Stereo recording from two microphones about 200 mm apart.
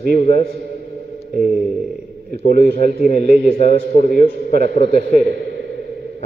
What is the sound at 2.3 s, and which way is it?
A man's voice, 50° right (ahead or behind).